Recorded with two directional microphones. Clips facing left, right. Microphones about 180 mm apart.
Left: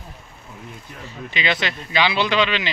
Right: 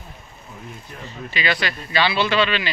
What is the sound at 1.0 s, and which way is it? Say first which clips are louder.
Speech: even; 20° left (ahead or behind).